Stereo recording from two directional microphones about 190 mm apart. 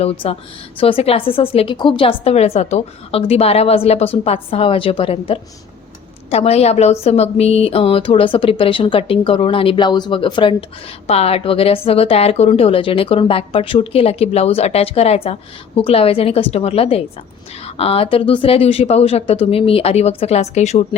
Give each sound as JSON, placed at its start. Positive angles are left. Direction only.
{"t": 0.0, "sound": "a woman's voice", "side_deg": 30}